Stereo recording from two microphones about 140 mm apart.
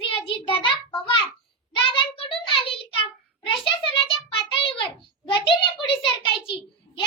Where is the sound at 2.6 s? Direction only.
40° left (ahead or behind).